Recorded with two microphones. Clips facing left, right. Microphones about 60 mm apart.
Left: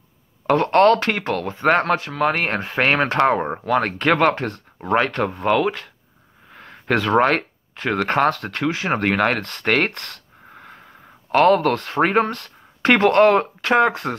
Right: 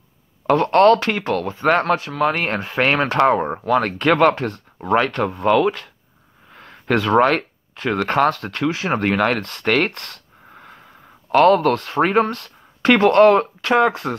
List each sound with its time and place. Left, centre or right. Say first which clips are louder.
0.6 s speech: right 1 dB; left
1.4 s speech: left 1 dB; left
3.3 s speech: right 2 dB; centre
3.7 s speech: right 1 dB; left
6.5 s a sound: right 1 dB; left
7.1 s speech: right 2 dB; left
11.3 s speech: right 2 dB; left